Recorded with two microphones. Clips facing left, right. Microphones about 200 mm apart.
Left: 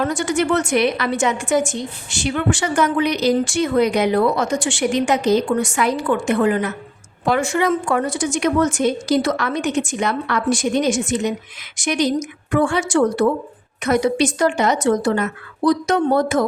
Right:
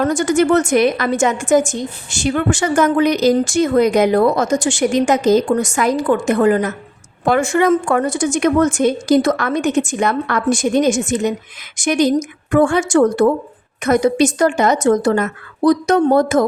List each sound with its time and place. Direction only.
0.0 s a woman's voice: 45° right (ahead or behind)